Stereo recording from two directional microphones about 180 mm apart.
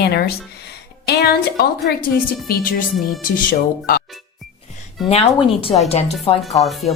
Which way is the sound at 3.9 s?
55° left (ahead or behind).